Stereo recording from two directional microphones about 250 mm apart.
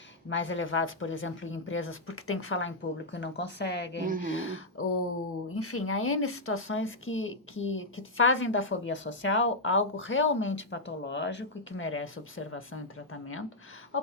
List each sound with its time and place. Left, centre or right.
0.3 s speech: left
4.0 s speech: right
4.3 s speech: left